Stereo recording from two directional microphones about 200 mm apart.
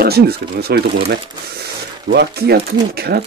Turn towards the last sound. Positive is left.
turn(degrees=-50)  # may be behind; listen again after turning